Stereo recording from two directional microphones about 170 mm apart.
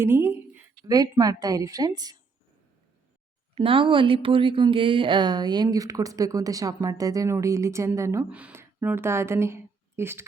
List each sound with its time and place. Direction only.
0.0 s a sound: 15° right (ahead or behind)
0.9 s speech: 20° right (ahead or behind)
3.5 s speech: 30° right (ahead or behind); by 10.2 s 15° right (ahead or behind)